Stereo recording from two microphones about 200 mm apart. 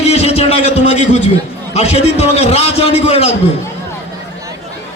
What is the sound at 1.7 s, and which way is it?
A man's voice, 30° left (ahead or behind).